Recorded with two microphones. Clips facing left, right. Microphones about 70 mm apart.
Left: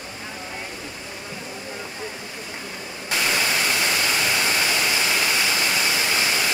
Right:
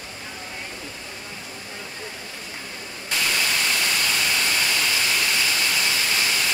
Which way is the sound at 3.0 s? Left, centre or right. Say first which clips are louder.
Left 2 dB; centre.